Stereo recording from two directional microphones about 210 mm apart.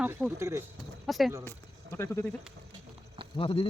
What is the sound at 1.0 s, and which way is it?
Speech, centre (ahead or behind).